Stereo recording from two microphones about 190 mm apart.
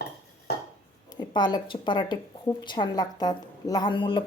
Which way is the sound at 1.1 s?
25° left (ahead or behind).